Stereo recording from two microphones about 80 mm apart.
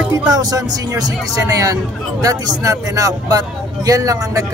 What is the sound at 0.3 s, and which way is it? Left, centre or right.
A man's voice, right.